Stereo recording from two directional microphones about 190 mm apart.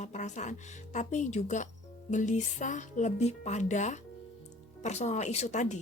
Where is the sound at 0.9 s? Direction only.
35° left (ahead or behind).